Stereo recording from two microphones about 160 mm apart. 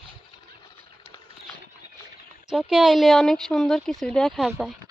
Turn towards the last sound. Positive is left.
turn(degrees=0)  # may be behind; listen again after turning